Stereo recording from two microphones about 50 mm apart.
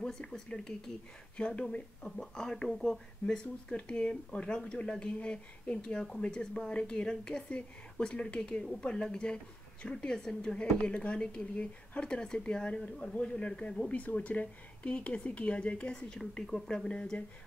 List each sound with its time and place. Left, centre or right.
0.0 s speech: centre
15.9 s speech: centre